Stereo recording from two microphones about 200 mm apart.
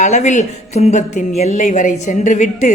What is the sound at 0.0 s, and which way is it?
A woman's voice, 35° left (ahead or behind).